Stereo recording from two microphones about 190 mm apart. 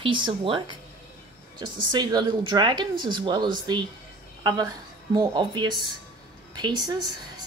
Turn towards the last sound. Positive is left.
turn(degrees=-25)  # may be behind; listen again after turning